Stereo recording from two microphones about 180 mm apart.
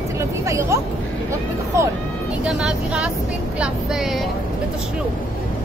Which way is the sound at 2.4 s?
5° right (ahead or behind).